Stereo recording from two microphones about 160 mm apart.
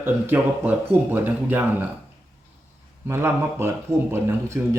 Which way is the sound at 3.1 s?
15° right (ahead or behind).